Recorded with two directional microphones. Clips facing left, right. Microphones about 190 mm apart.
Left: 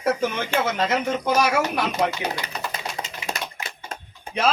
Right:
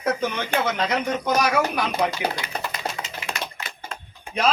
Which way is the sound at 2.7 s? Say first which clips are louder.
Right 1 dB; 40° left (ahead or behind).